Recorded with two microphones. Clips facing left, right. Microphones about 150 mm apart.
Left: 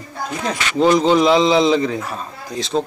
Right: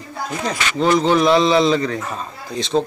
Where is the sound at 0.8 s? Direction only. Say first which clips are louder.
Left 2 dB; 15° left (ahead or behind).